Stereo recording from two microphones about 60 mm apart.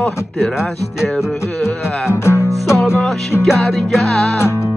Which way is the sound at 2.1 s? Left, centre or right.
Left.